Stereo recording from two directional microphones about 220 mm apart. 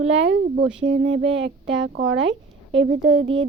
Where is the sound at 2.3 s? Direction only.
60° right (ahead or behind).